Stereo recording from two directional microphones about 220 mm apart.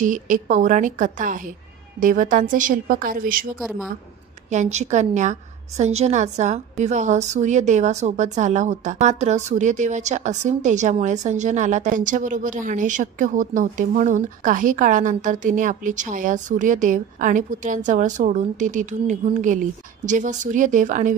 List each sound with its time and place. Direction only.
0.0 s a woman's voice: 35° right (ahead or behind)
3.5 s a woman's voice: centre (ahead or behind)
4.5 s a woman's voice: 30° right (ahead or behind)